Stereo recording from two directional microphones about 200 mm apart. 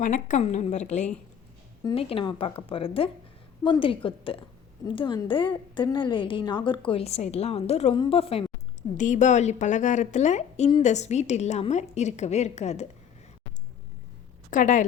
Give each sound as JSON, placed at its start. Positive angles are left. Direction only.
{"t": 0.0, "sound": "a woman's voice", "side_deg": 40}
{"t": 1.8, "sound": "a woman's voice", "side_deg": 25}
{"t": 14.5, "sound": "a woman's voice", "side_deg": 40}